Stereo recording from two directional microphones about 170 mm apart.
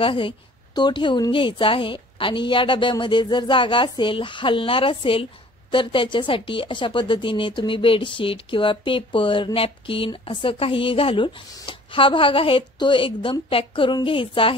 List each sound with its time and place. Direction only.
0.0 s a woman's voice: 30° left (ahead or behind)